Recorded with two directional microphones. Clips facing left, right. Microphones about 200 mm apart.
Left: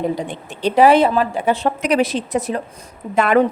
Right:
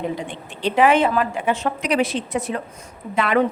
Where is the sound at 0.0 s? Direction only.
40° left (ahead or behind).